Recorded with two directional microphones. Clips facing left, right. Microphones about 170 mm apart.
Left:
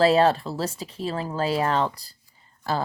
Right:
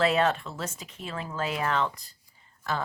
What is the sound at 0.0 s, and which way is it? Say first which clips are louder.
Speech: left 6 dB; 35° left (ahead or behind).